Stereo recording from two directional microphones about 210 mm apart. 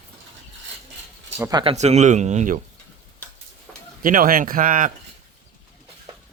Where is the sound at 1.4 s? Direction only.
20° right (ahead or behind).